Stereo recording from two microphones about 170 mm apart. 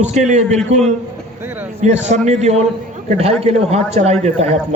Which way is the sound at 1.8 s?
40° right (ahead or behind).